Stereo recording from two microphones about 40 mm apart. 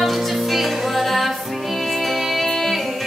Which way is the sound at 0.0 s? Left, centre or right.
Centre.